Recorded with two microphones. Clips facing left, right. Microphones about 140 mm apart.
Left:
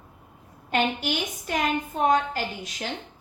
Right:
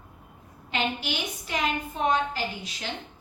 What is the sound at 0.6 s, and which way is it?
A woman's voice, 50° left (ahead or behind).